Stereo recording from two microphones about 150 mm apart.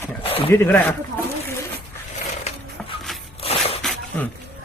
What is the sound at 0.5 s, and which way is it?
Speech, 15° left (ahead or behind).